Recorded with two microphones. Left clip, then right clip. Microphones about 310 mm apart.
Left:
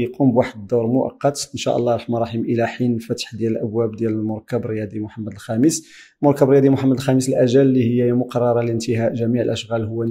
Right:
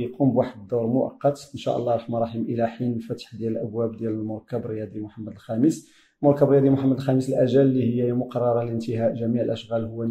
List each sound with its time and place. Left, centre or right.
0.0 s speech: left